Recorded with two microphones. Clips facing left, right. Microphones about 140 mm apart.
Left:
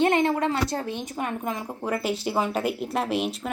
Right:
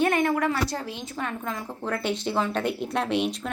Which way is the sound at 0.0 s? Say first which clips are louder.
Left 1 dB; 25° left (ahead or behind).